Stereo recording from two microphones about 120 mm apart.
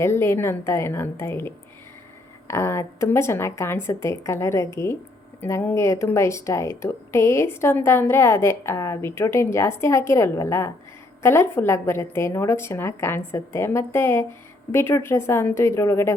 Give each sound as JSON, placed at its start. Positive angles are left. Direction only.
{"t": 0.0, "sound": "a woman's voice", "side_deg": 20}